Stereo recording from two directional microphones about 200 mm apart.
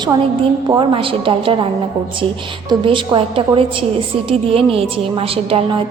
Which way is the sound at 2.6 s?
25° right (ahead or behind).